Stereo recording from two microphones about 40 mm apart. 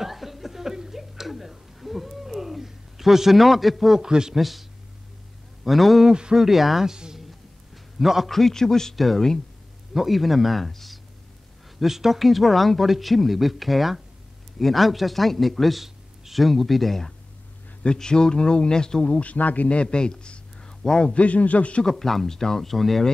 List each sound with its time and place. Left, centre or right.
0.0 s chuckle: centre
4.0 s speech: centre
4.4 s a man's voice: centre
6.0 s speech: right
6.3 s speech: centre
7.2 s a sound: centre
8.3 s speech: centre
8.9 s a man's voice: centre
17.9 s speech: centre
19.1 s a man's voice: left
19.8 s a sound: left
20.8 s speech: centre
21.1 s a man's voice: left
21.8 s speech: centre